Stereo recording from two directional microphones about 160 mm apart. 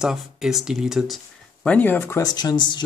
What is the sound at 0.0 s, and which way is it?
Speech, centre (ahead or behind).